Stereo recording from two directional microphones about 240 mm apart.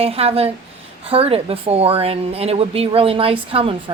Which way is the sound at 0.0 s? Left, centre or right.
Right.